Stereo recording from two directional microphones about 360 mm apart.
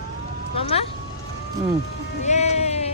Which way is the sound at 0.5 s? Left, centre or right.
Centre.